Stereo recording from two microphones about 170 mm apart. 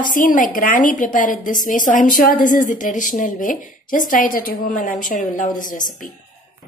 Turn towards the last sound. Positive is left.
turn(degrees=50)  # may be behind; listen again after turning